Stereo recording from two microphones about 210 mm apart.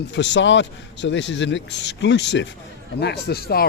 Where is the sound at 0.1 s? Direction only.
55° left (ahead or behind).